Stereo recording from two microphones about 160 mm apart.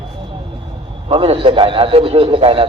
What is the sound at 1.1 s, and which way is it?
A man's voice, 35° right (ahead or behind).